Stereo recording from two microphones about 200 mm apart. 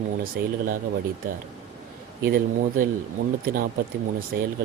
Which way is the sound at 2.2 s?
45° right (ahead or behind).